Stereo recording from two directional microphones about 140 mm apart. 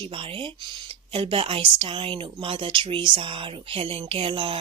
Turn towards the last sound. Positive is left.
turn(degrees=-35)  # may be behind; listen again after turning